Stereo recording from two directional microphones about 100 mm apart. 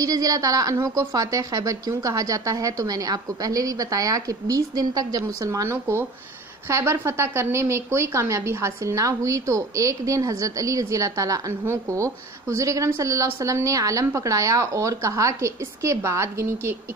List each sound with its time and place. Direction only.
0.0 s a woman's voice: 35° right (ahead or behind)